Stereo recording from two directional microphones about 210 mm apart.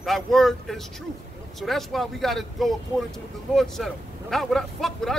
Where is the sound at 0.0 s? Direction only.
Centre (ahead or behind).